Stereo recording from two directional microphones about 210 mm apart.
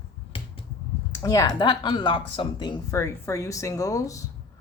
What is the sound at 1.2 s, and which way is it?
Speech, 15° left (ahead or behind).